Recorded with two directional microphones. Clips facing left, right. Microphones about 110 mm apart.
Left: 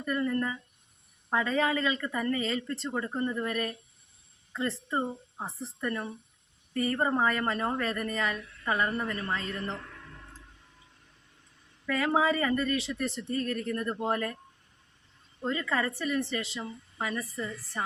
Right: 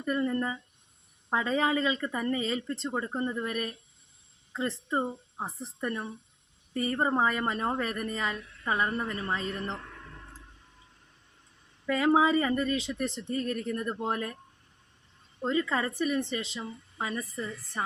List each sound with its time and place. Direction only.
0.0 s speech: 20° right (ahead or behind)
11.9 s speech: 20° right (ahead or behind)
15.4 s speech: 20° right (ahead or behind)